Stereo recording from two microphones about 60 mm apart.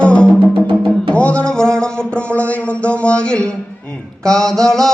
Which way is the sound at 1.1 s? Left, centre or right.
Centre.